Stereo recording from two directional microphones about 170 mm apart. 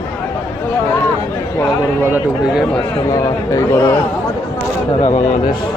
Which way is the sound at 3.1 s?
20° left (ahead or behind).